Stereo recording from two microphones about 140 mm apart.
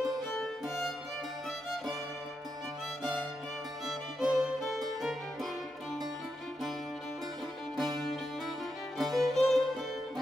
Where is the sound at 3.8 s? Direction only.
Centre (ahead or behind).